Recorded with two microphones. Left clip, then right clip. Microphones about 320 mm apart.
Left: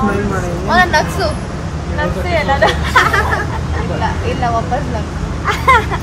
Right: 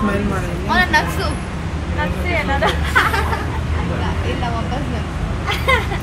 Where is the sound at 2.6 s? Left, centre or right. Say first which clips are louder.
Left 4 dB; left.